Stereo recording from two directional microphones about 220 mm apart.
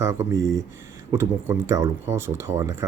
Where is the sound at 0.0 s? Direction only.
10° right (ahead or behind).